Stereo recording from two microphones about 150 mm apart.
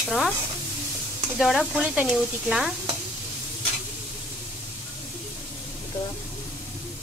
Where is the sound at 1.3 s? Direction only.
Centre (ahead or behind).